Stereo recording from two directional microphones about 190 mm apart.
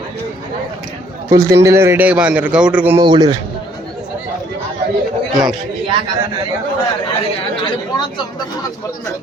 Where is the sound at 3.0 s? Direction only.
25° right (ahead or behind).